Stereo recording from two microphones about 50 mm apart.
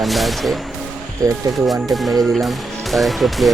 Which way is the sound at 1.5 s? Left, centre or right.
Centre.